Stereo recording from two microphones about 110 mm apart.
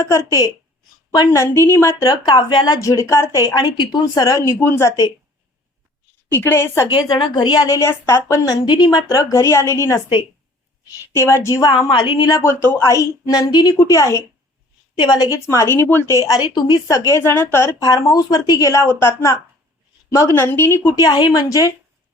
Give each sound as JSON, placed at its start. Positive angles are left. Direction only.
{"t": 0.0, "sound": "a woman's voice", "side_deg": 25}
{"t": 2.2, "sound": "a woman's voice", "side_deg": 45}
{"t": 6.3, "sound": "a woman's voice", "side_deg": 20}
{"t": 7.1, "sound": "a woman's voice", "side_deg": 45}
{"t": 11.1, "sound": "a woman's voice", "side_deg": 25}
{"t": 14.9, "sound": "a woman's voice", "side_deg": 40}
{"t": 15.4, "sound": "a woman's voice", "side_deg": 25}
{"t": 17.1, "sound": "a woman's voice", "side_deg": 25}